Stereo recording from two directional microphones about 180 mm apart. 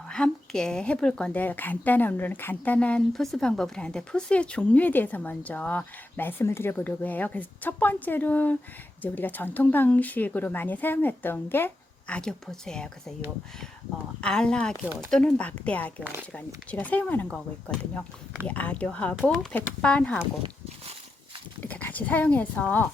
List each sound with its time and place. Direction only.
0.1 s a woman's voice: 5° left (ahead or behind)
14.2 s a woman's voice: 5° left (ahead or behind)
21.6 s a woman's voice: 10° left (ahead or behind)